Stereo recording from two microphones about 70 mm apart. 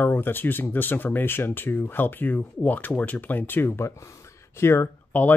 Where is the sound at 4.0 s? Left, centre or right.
Left.